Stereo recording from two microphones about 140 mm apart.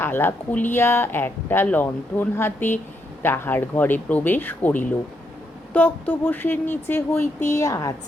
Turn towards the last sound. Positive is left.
turn(degrees=25)  # may be behind; listen again after turning